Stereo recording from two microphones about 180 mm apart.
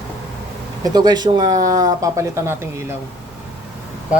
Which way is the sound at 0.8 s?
20° right (ahead or behind).